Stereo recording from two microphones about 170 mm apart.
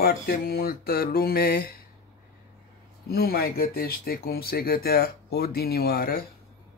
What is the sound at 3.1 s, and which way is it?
Speech, 60° left (ahead or behind).